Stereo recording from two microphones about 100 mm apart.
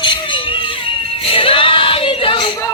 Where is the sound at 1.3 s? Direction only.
65° left (ahead or behind).